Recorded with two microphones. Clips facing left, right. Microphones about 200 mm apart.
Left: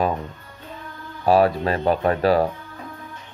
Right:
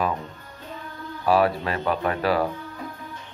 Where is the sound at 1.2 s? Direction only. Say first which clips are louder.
Left 4 dB; 35° left (ahead or behind).